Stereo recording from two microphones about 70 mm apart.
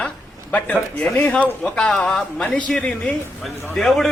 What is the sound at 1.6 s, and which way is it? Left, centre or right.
Speech, centre.